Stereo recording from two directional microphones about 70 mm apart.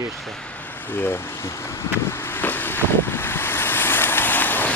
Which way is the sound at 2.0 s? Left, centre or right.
Left.